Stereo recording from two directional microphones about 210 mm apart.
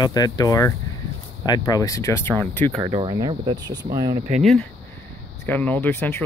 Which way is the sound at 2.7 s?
25° right (ahead or behind).